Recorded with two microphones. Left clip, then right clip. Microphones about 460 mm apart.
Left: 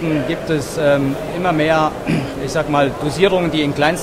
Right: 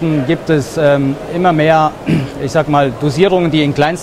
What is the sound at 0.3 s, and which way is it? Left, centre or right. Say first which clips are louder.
Speech: right 5 dB; right.